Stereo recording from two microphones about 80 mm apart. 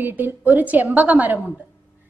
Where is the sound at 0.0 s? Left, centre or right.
Right.